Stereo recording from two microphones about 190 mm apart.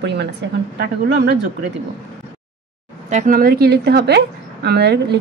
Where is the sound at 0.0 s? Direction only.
65° right (ahead or behind).